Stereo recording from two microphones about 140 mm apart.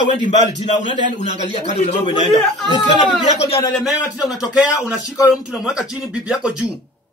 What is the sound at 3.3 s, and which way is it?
Speech, 50° left (ahead or behind).